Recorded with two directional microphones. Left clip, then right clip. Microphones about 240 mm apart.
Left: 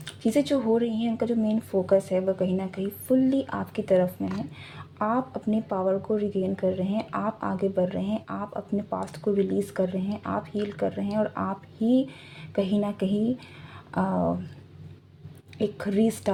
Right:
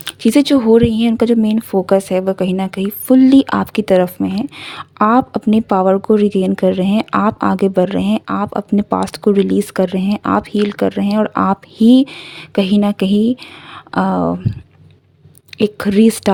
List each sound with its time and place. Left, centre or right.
0.0 s a woman's voice: right
15.5 s a woman's voice: right